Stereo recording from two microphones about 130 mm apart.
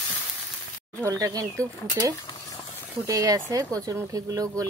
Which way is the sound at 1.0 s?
25° right (ahead or behind).